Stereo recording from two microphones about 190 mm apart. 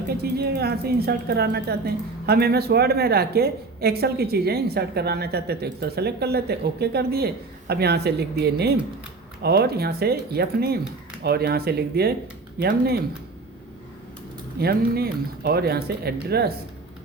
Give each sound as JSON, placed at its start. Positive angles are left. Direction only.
{"t": 0.1, "sound": "a woman's voice", "side_deg": -55}
{"t": 14.6, "sound": "a woman's voice", "side_deg": -55}